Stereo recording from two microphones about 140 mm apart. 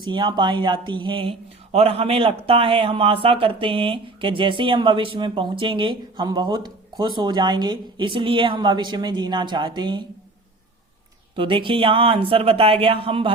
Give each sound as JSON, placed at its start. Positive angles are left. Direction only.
{"t": 0.0, "sound": "speech", "side_deg": -35}
{"t": 11.3, "sound": "speech", "side_deg": -35}